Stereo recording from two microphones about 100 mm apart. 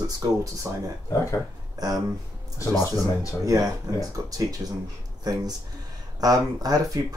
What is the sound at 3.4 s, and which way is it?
Speech, 35° right (ahead or behind).